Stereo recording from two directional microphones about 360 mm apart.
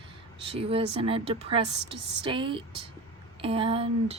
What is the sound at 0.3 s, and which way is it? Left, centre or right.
Speech, centre.